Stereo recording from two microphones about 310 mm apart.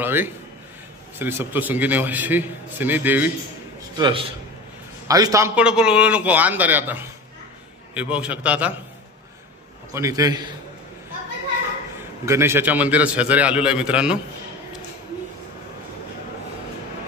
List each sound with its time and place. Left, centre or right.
0.0 s a man's voice: centre
4.0 s a man's voice: centre
9.9 s a man's voice: centre
12.3 s a man's voice: centre